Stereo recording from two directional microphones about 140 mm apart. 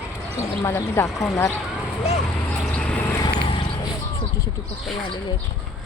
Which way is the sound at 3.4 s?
35° left (ahead or behind).